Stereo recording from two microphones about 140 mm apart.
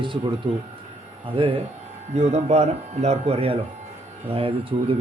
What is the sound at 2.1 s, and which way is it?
Speech, 50° right (ahead or behind).